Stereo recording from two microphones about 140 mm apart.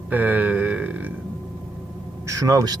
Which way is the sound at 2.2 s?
25° right (ahead or behind).